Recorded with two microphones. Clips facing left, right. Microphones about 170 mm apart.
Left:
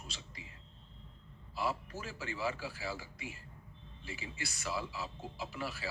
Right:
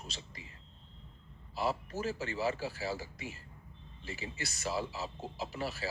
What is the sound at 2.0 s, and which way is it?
Speech, 40° right (ahead or behind).